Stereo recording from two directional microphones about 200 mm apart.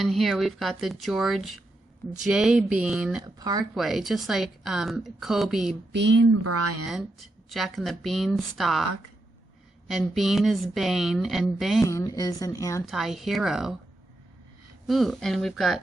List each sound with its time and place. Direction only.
0.0 s speech: centre (ahead or behind)
3.2 s speech: 20° right (ahead or behind)
3.8 s speech: centre (ahead or behind)
5.9 s speech: 60° right (ahead or behind)
6.8 s speech: centre (ahead or behind)
9.9 s speech: centre (ahead or behind)
11.8 s speech: 15° left (ahead or behind)
12.9 s speech: centre (ahead or behind)
14.8 s speech: centre (ahead or behind)